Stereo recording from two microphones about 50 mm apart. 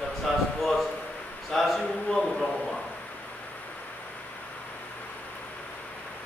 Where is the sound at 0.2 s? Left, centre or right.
Centre.